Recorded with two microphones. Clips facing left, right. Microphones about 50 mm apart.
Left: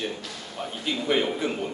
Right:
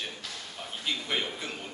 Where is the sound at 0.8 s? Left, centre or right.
Centre.